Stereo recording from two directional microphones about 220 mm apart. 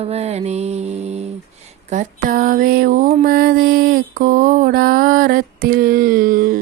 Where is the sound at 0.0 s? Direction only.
30° right (ahead or behind).